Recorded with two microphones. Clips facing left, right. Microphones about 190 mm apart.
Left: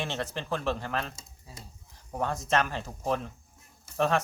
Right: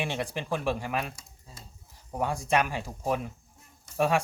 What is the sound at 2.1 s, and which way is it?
A man's voice, 10° right (ahead or behind).